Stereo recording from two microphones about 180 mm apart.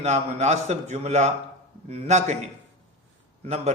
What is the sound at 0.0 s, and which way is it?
A man's voice, 40° right (ahead or behind).